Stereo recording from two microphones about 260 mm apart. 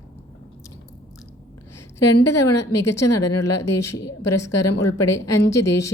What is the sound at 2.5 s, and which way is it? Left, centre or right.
A woman's voice, left.